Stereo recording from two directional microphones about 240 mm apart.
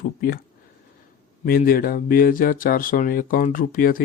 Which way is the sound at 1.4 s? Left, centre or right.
Left.